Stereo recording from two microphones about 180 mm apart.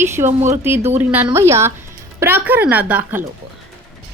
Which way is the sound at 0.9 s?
10° right (ahead or behind).